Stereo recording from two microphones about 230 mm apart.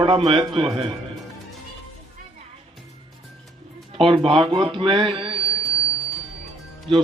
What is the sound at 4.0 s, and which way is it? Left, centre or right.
Speech, right.